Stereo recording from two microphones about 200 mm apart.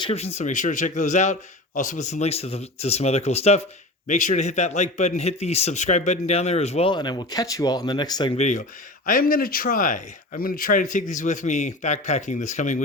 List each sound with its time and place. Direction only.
0.0 s a man's voice: 30° left (ahead or behind)
8.4 s a man's voice: 35° left (ahead or behind)